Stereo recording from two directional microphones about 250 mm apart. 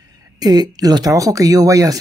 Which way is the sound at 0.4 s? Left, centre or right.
Centre.